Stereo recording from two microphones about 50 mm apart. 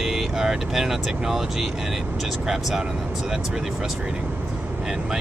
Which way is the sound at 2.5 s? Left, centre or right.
Centre.